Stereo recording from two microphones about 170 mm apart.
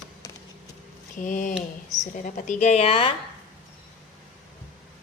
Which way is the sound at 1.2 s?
50° left (ahead or behind).